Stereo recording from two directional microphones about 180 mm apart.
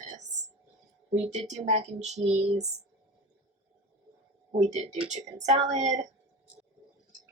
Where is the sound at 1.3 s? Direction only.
40° right (ahead or behind).